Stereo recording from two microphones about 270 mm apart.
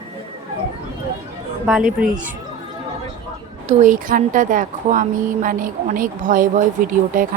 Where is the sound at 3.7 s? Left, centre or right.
Right.